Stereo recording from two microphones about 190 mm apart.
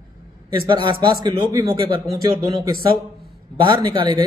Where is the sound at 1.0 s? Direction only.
20° right (ahead or behind).